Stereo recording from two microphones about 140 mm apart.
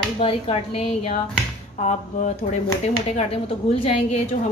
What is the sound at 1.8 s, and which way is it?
A woman's voice, 55° left (ahead or behind).